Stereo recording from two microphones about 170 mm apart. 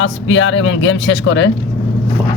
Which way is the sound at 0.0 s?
90° left.